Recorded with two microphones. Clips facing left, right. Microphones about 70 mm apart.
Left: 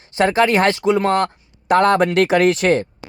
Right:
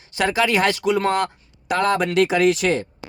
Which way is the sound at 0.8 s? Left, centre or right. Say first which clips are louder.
Left 3 dB; left.